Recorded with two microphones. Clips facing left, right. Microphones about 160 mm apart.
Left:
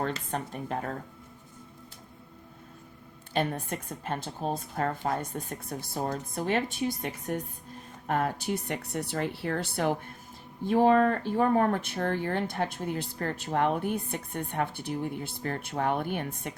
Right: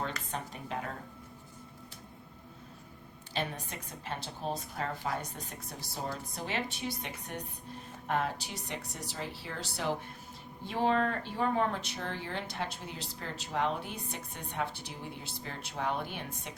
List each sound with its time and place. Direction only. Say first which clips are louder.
0.3 s speech: left 6 dB; 50° left (ahead or behind)
3.3 s speech: left 7 dB; 50° left (ahead or behind)